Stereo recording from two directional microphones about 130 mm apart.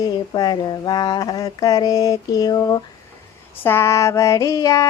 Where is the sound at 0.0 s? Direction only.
30° left (ahead or behind).